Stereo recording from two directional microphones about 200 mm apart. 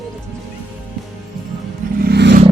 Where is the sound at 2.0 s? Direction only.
55° right (ahead or behind).